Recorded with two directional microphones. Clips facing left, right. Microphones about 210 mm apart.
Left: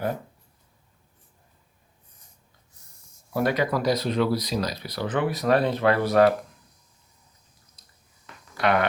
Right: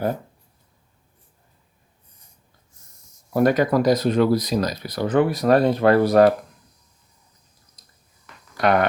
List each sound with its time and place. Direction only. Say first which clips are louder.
3.3 s speech: right 6 dB; 45° right (ahead or behind)
8.5 s speech: right 4 dB; 45° right (ahead or behind)